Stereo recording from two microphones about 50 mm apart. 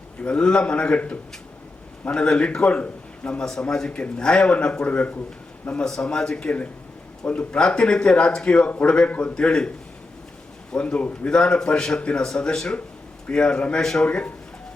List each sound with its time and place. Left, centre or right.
0.2 s speech: left
5.8 s a man's voice: centre; by 9.3 s left
9.3 s a man's voice: centre